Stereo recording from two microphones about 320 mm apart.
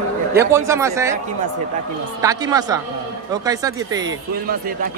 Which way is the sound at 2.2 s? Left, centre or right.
Centre.